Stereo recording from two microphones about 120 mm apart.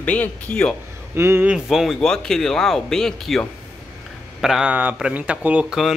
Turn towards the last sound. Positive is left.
turn(degrees=-5)  # may be behind; listen again after turning